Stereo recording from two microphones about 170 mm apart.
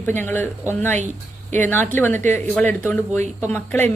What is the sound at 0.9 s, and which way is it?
Speech, 45° right (ahead or behind).